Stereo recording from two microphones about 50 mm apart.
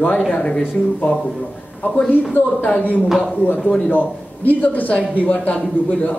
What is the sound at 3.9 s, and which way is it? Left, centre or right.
A man's voice, left.